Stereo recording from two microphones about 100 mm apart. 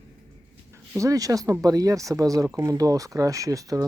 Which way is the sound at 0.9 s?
35° right (ahead or behind).